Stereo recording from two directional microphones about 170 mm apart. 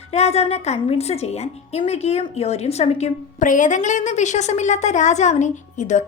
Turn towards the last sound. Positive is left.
turn(degrees=45)  # may be behind; listen again after turning